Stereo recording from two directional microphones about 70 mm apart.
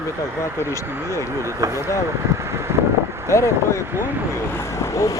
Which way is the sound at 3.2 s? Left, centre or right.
Left.